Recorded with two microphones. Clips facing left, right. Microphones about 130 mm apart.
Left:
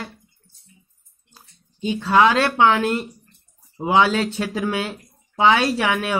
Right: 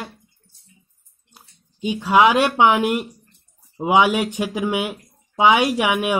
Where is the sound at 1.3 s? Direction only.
15° right (ahead or behind).